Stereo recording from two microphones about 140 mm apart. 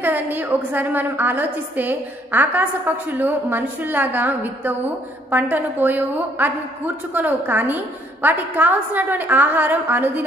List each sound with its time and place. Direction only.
0.0 s a woman's voice: 15° right (ahead or behind)